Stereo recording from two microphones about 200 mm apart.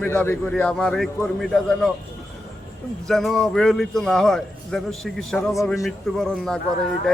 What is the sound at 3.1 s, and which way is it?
A man's voice, centre (ahead or behind).